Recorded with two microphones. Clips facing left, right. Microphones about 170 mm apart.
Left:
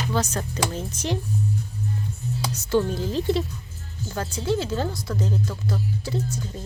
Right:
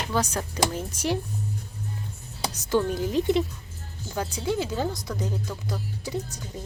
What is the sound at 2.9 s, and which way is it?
A woman's voice, 15° right (ahead or behind).